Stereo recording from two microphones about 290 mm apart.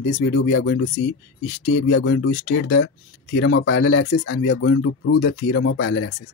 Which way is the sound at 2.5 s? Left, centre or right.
Left.